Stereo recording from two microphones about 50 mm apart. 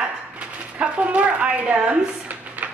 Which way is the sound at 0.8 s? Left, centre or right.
Right.